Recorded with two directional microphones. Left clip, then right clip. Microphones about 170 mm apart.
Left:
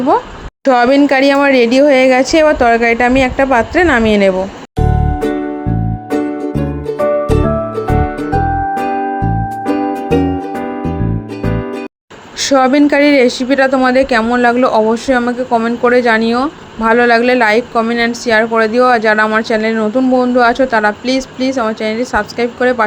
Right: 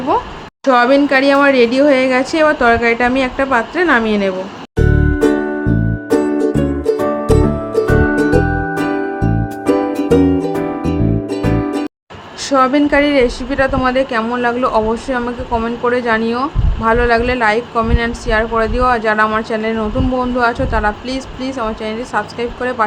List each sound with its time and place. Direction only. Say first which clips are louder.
0.6 s a woman's voice: left 2 dB; 25° left (ahead or behind)
9.7 s music: right 2 dB; 5° right (ahead or behind)
12.5 s a woman's voice: left 3 dB; 25° left (ahead or behind)